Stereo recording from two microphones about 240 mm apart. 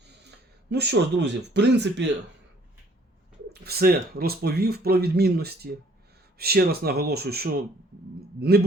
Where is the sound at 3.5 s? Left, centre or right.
Right.